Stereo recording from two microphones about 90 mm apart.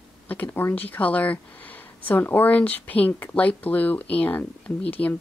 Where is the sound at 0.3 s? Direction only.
20° left (ahead or behind).